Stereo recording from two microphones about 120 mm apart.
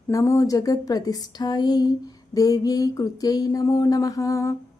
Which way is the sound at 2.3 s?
30° left (ahead or behind).